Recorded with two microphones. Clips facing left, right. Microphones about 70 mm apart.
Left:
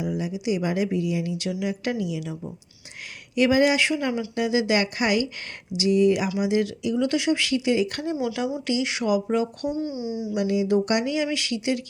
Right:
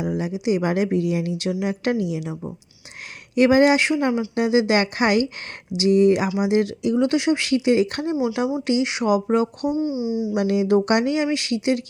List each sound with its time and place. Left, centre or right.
0.0 s speech: right
1.5 s speech: right
3.3 s speech: right
6.2 s speech: right
6.5 s speech: right
8.1 s speech: centre
8.6 s speech: right
9.6 s speech: centre
10.4 s speech: right
11.3 s speech: right